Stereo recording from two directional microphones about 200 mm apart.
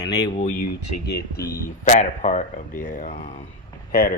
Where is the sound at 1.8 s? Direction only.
40° left (ahead or behind).